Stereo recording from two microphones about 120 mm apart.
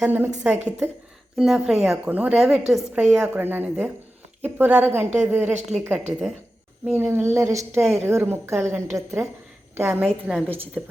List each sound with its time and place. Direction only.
0.0 s a woman's voice: 15° right (ahead or behind)